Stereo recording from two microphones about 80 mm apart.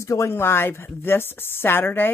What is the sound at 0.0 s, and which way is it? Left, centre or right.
Speech, left.